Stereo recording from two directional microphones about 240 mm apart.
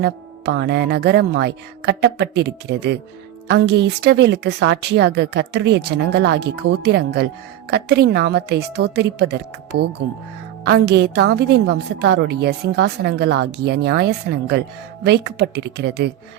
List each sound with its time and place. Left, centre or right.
0.0 s a woman's voice: right